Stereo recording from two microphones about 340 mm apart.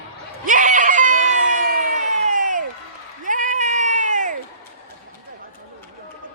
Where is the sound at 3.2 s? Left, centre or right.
Right.